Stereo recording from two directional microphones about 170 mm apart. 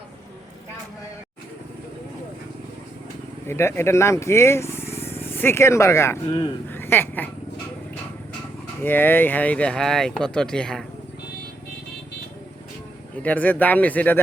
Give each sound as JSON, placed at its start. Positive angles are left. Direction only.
{"t": 3.4, "sound": "speech", "side_deg": 15}
{"t": 8.8, "sound": "speech", "side_deg": 10}
{"t": 13.2, "sound": "speech", "side_deg": 10}